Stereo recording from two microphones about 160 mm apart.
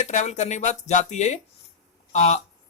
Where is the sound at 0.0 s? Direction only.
50° left (ahead or behind).